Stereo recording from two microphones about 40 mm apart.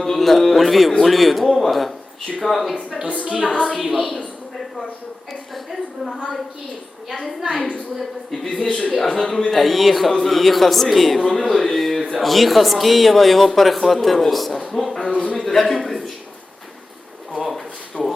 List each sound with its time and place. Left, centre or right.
0.0 s speech: centre
3.2 s a woman's voice: right
3.5 s speech: left
3.8 s speech: centre
7.1 s speech: centre
8.4 s speech: centre
15.1 s a man's voice: left
15.4 s speech: centre
17.3 s a sound: centre
18.0 s speech: left